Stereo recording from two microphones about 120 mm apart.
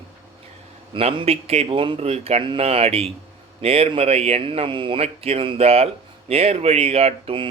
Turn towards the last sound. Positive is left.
turn(degrees=-50)  # may be behind; listen again after turning